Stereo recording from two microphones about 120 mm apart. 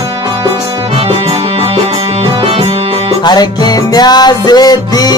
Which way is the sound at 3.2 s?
35° left (ahead or behind).